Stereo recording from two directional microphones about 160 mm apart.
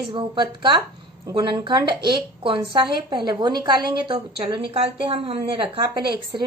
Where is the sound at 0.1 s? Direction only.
35° right (ahead or behind).